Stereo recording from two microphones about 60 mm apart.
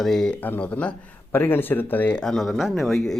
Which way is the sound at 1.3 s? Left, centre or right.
Left.